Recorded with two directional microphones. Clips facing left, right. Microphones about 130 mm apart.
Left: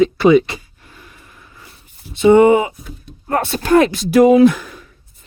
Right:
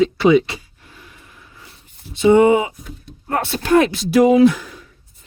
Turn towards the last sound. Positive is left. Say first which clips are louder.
# left 2 dB
turn(degrees=55)  # may be behind; listen again after turning